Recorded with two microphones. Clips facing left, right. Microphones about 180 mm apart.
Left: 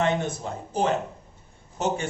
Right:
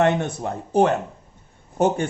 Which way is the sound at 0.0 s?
65° right (ahead or behind).